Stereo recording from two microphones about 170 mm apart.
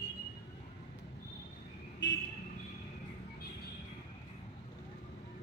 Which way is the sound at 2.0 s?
90° left.